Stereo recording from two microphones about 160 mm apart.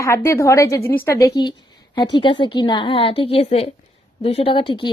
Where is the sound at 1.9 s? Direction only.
30° left (ahead or behind).